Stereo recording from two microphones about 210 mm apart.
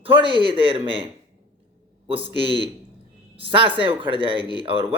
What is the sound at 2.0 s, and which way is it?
Speech, 25° right (ahead or behind).